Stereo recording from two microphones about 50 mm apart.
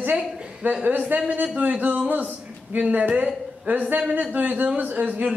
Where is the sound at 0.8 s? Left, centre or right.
Right.